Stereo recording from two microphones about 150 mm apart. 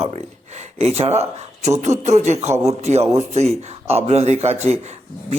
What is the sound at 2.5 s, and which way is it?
Speech, 20° right (ahead or behind).